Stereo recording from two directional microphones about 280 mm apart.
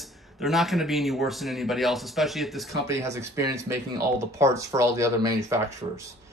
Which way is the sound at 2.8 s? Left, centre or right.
Centre.